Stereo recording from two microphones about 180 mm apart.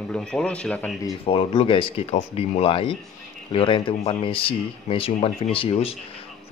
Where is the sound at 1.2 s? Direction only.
30° left (ahead or behind).